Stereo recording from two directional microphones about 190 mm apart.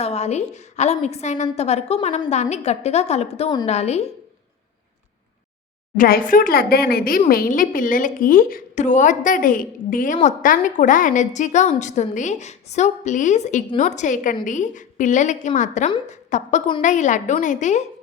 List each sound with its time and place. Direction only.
0.0 s a woman's voice: 35° left (ahead or behind)
6.0 s a woman's voice: 50° left (ahead or behind)